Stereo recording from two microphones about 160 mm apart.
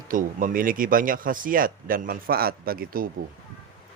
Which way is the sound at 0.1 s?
55° right (ahead or behind).